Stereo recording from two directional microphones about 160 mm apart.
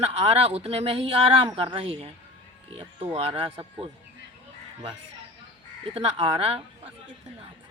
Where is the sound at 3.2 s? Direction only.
35° right (ahead or behind).